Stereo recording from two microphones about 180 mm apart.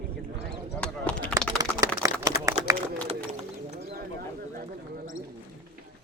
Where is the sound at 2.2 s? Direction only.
20° right (ahead or behind).